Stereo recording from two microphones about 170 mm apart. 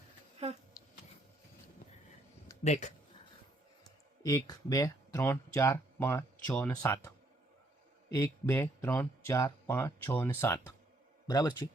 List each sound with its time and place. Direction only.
0.4 s speech: 40° right (ahead or behind)
2.6 s speech: 40° left (ahead or behind)
4.2 s speech: 20° left (ahead or behind)
8.1 s speech: 15° left (ahead or behind)